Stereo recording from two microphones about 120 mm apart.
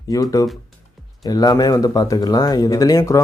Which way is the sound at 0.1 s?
30° left (ahead or behind).